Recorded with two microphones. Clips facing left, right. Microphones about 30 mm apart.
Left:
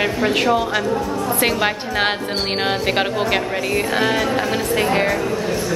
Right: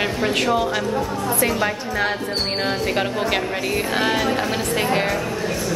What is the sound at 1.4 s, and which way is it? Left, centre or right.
Speech, left.